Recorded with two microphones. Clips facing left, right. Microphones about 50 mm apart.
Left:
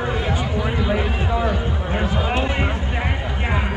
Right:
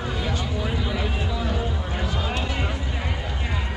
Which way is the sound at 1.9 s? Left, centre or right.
Left.